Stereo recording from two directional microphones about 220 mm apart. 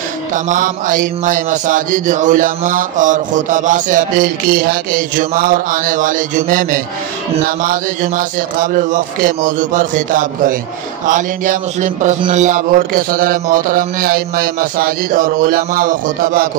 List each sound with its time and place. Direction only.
0.3 s mantra: 35° right (ahead or behind)